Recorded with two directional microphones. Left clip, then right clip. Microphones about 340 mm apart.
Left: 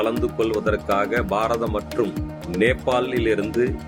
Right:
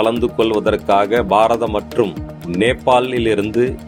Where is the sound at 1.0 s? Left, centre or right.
Centre.